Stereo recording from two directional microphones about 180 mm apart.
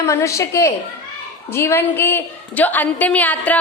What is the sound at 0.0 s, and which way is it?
A woman's voice, 15° left (ahead or behind).